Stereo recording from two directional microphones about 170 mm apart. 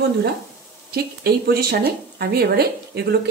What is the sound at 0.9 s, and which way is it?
Speech, 65° right (ahead or behind).